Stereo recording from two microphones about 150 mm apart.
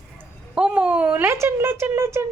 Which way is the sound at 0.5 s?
10° right (ahead or behind).